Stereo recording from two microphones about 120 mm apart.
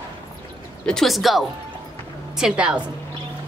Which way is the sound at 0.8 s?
Centre (ahead or behind).